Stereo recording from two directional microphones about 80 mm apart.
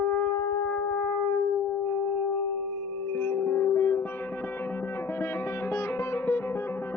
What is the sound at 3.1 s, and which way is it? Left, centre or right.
Music, left.